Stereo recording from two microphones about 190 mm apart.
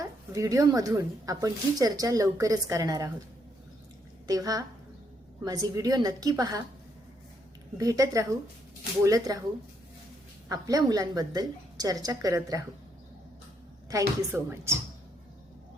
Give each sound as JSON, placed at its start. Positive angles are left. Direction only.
{"t": 0.0, "sound": "a woman's voice", "side_deg": -15}
{"t": 4.3, "sound": "a woman's voice", "side_deg": -20}
{"t": 7.8, "sound": "a woman's voice", "side_deg": -15}
{"t": 10.5, "sound": "a woman's voice", "side_deg": -20}
{"t": 14.2, "sound": "a woman's voice", "side_deg": -15}